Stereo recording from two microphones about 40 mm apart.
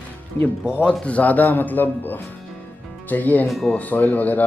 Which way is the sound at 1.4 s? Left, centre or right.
Left.